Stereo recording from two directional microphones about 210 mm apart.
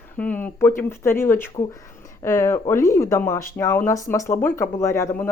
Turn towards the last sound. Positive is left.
turn(degrees=10)  # may be behind; listen again after turning